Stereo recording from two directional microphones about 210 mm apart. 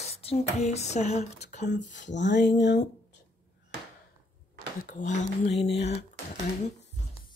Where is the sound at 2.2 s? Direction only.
55° left (ahead or behind).